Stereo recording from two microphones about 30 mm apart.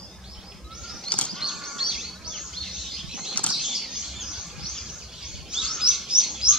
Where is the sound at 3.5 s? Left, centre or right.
Centre.